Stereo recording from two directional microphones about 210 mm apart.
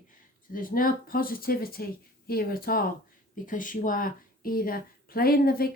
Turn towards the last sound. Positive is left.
turn(degrees=45)  # may be behind; listen again after turning